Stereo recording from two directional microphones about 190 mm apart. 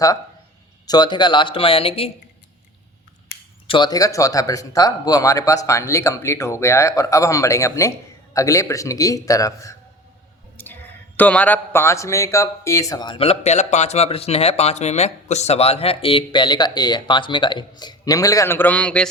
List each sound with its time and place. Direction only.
0.9 s speech: 20° left (ahead or behind)
3.7 s speech: 20° left (ahead or behind)
10.6 s a sound: 10° left (ahead or behind)
11.2 s speech: 10° left (ahead or behind)